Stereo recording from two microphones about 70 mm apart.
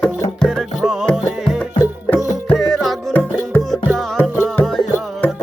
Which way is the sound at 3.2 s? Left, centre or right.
Left.